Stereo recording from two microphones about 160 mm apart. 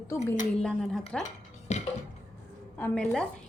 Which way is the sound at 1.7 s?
45° left (ahead or behind).